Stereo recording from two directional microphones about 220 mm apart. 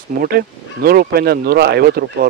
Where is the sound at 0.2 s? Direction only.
45° right (ahead or behind).